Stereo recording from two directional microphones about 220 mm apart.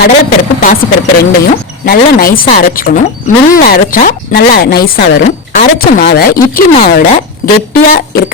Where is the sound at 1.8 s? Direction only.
45° left (ahead or behind).